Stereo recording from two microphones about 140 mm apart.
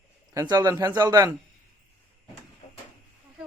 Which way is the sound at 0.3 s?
25° right (ahead or behind).